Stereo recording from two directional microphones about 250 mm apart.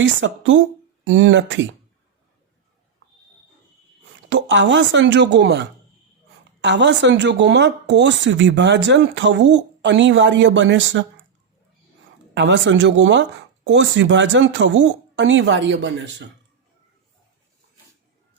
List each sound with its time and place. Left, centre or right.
0.0 s speech: right
4.3 s speech: right
12.3 s speech: right